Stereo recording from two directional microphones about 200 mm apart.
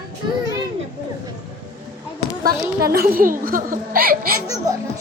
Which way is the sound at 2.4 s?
50° right (ahead or behind).